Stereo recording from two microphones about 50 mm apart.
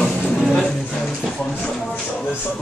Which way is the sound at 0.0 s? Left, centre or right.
Centre.